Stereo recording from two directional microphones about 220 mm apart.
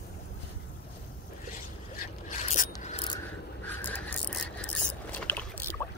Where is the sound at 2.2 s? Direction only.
35° left (ahead or behind).